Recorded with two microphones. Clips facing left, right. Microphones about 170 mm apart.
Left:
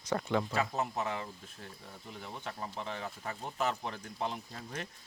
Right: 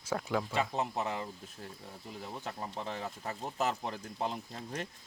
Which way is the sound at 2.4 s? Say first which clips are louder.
Even; 35° right (ahead or behind).